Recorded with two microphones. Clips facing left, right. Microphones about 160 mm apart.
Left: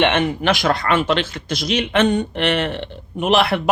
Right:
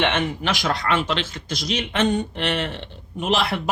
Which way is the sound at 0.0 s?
65° left (ahead or behind).